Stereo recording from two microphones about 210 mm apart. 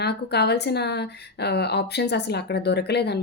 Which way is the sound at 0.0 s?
50° left (ahead or behind).